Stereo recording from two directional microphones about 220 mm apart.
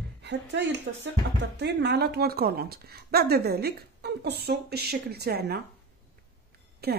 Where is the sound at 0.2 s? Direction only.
50° right (ahead or behind).